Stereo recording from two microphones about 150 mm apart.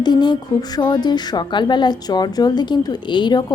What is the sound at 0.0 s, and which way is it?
A woman's voice, 30° left (ahead or behind).